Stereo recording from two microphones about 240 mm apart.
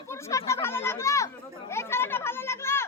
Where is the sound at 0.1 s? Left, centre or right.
Centre.